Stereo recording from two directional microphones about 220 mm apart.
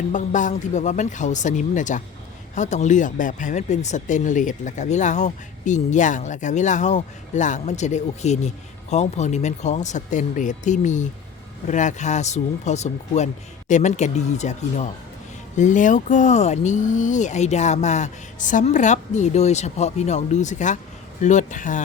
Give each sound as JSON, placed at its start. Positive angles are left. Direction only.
{"t": 0.1, "sound": "speech", "side_deg": 35}